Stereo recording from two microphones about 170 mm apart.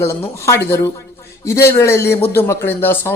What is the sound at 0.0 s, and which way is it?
Speech, 15° left (ahead or behind).